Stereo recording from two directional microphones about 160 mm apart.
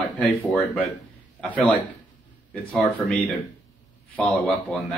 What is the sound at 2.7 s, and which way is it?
Speech, 5° left (ahead or behind).